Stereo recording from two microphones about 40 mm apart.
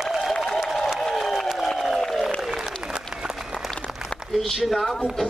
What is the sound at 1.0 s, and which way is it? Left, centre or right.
Applause, centre.